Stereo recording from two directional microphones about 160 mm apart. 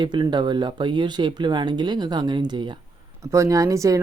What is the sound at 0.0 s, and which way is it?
Speech, 30° right (ahead or behind).